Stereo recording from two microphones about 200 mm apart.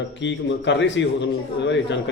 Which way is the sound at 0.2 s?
65° left (ahead or behind).